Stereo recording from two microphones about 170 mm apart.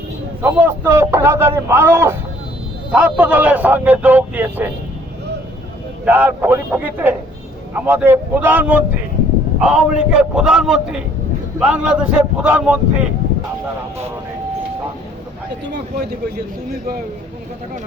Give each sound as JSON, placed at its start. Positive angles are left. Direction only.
{"t": 0.4, "sound": "a man's voice", "side_deg": -15}
{"t": 6.1, "sound": "a man's voice", "side_deg": -10}